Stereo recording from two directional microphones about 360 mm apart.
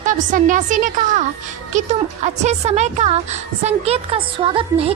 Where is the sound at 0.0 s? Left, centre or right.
Right.